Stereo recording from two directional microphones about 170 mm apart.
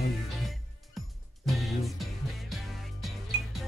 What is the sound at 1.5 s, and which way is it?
Music, centre (ahead or behind).